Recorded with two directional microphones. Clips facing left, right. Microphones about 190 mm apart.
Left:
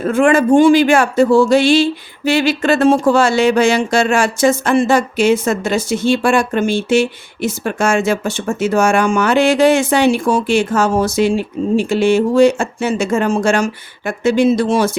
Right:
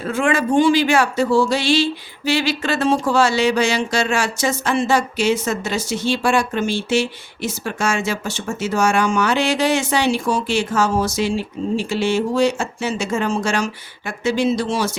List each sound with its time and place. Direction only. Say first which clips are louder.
0.0 s speech: left 7 dB; 50° left (ahead or behind)